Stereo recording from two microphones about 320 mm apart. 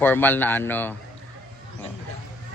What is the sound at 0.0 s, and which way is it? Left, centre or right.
Speech, centre.